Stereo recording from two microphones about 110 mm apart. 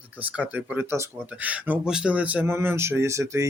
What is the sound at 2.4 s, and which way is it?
Speech, 25° right (ahead or behind).